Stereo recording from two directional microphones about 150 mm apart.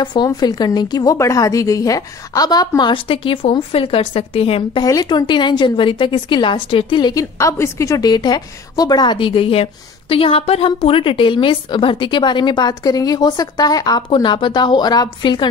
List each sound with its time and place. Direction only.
0.0 s a woman's voice: 30° left (ahead or behind)
4.8 s a woman's voice: 25° left (ahead or behind)